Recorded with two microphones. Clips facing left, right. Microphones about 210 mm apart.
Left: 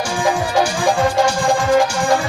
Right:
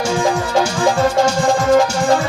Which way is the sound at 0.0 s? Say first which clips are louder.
Right 2 dB; 25° right (ahead or behind).